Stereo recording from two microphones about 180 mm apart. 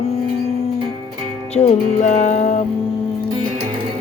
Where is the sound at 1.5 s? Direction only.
35° left (ahead or behind).